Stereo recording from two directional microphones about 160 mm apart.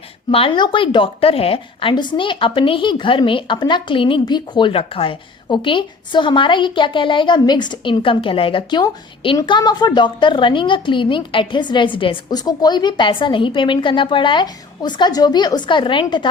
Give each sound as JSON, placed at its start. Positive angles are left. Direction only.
{"t": 0.3, "sound": "a woman's voice", "side_deg": 35}